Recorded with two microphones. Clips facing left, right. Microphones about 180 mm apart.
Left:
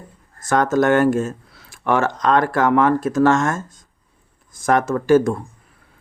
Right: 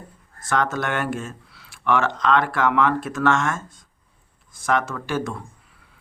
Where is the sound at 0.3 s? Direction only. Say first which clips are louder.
Left 7 dB; 45° left (ahead or behind).